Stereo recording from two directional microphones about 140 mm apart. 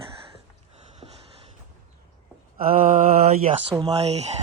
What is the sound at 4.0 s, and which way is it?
Speech, 50° right (ahead or behind).